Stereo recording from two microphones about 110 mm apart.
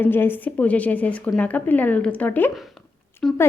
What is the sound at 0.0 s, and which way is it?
A woman's voice, 20° left (ahead or behind).